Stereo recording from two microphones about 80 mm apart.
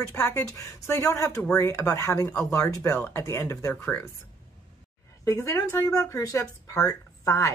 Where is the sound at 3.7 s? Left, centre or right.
Centre.